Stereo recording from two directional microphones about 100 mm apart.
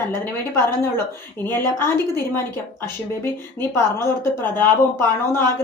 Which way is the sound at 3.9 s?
25° left (ahead or behind).